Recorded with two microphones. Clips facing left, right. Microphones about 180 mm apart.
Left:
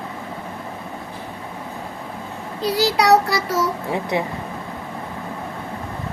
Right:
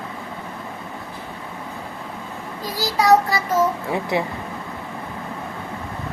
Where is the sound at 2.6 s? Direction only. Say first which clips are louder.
Left 4 dB; 80° left.